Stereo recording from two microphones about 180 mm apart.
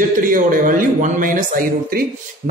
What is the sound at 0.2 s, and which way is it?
A man's voice, 50° right (ahead or behind).